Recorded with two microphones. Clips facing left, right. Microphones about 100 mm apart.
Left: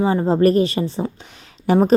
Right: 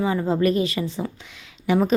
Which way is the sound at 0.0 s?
30° left (ahead or behind).